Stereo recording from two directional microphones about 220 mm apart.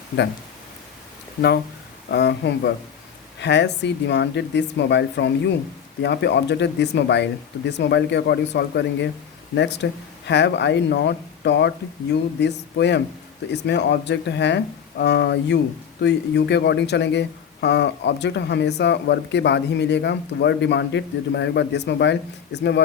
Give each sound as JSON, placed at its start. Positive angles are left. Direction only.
{"t": 2.0, "sound": "speech", "side_deg": 50}